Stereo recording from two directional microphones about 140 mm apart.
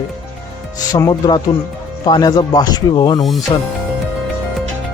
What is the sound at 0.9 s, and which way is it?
Speech, 25° left (ahead or behind).